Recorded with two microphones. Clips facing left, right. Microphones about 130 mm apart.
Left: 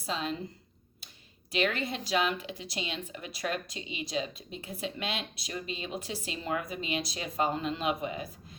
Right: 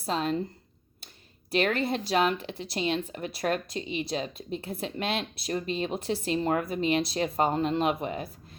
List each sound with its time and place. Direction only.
0.1 s speech: 45° right (ahead or behind)
1.5 s speech: 40° right (ahead or behind)